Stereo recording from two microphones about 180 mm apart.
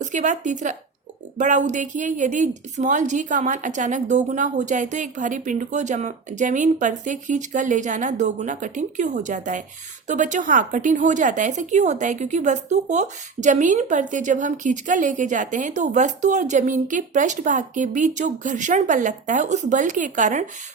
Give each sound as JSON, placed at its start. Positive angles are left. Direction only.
{"t": 0.0, "sound": "a woman's voice", "side_deg": -45}